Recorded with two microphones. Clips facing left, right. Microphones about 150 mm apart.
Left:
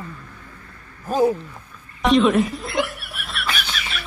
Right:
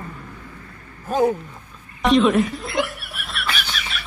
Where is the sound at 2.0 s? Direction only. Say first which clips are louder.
Even; centre (ahead or behind).